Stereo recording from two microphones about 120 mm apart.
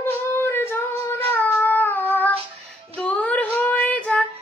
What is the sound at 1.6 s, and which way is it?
Cat, 15° left (ahead or behind).